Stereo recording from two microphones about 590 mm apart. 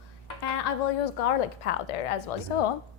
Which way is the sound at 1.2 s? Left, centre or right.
Left.